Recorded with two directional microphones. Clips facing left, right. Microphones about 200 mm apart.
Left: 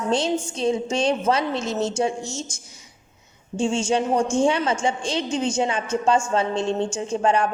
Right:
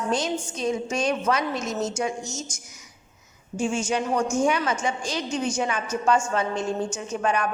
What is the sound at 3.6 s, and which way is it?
A woman's voice, 25° left (ahead or behind).